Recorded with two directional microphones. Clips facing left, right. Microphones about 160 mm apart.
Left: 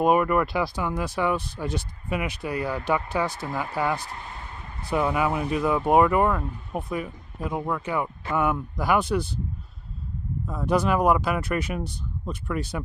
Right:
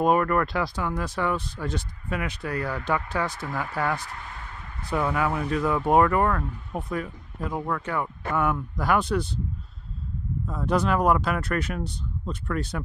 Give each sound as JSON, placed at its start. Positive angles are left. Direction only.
{"t": 0.0, "sound": "speech", "side_deg": 10}
{"t": 3.3, "sound": "speech", "side_deg": 30}
{"t": 3.7, "sound": "speech", "side_deg": 5}
{"t": 4.0, "sound": "a sound", "side_deg": 25}
{"t": 4.9, "sound": "speech", "side_deg": 10}
{"t": 10.4, "sound": "speech", "side_deg": 5}